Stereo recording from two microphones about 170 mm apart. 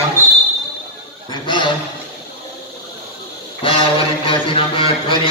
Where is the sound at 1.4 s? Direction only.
25° left (ahead or behind).